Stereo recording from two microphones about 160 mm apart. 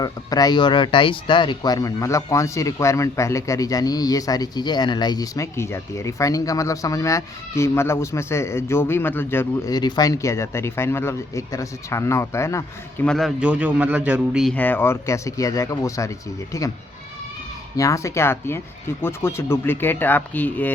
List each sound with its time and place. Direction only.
0.0 s speech: 25° left (ahead or behind)
13.1 s a man's voice: centre (ahead or behind)
14.5 s speech: 10° left (ahead or behind)
17.7 s speech: 20° left (ahead or behind)